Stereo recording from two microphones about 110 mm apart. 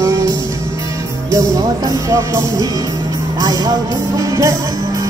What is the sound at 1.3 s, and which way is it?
Music, 30° right (ahead or behind).